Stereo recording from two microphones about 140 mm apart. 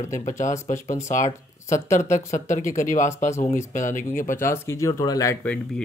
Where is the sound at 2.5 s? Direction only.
65° left (ahead or behind).